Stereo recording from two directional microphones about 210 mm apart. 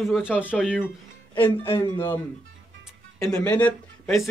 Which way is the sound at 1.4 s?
25° left (ahead or behind).